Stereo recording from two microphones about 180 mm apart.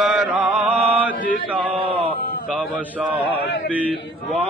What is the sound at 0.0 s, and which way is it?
Chant, 5° right (ahead or behind).